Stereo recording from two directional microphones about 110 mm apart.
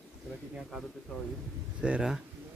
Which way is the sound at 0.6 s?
5° right (ahead or behind).